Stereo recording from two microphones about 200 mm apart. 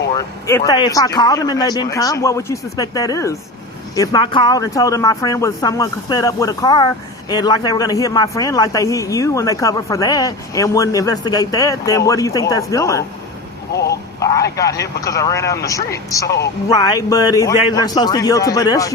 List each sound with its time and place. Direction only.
0.1 s speech: 15° left (ahead or behind)
14.5 s a man's voice: 15° left (ahead or behind)